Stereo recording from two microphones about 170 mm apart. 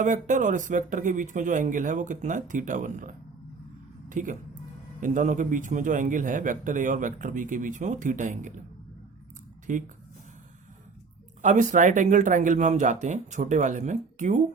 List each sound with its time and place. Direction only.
0.0 s a man's voice: 50° right (ahead or behind)
9.7 s a man's voice: 50° right (ahead or behind)
11.4 s a man's voice: 45° right (ahead or behind)